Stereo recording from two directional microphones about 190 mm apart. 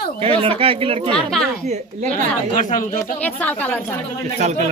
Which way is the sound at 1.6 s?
35° right (ahead or behind).